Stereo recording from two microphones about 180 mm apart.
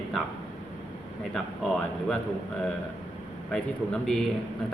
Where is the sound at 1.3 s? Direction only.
5° left (ahead or behind).